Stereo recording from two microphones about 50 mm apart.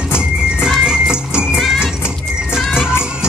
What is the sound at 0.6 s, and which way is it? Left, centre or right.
Music, centre.